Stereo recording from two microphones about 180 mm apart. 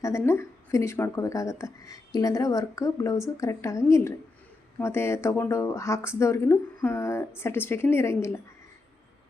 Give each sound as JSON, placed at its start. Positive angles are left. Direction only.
{"t": 0.3, "sound": "speech", "side_deg": 15}